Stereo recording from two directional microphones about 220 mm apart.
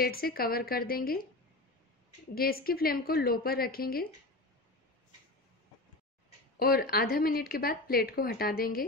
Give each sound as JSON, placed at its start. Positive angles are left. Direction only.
{"t": 0.0, "sound": "speech", "side_deg": 45}
{"t": 2.3, "sound": "speech", "side_deg": 40}
{"t": 6.6, "sound": "speech", "side_deg": 45}